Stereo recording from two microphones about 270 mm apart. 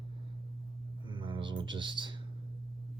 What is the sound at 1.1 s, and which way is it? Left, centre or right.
Speech, centre.